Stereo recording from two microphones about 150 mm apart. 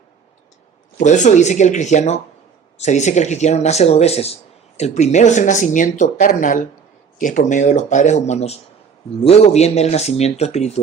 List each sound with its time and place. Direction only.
0.9 s speech: 55° left (ahead or behind)